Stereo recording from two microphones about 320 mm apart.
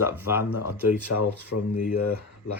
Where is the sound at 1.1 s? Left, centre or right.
Left.